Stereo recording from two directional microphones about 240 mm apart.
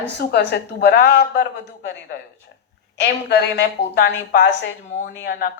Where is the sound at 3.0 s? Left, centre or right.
Left.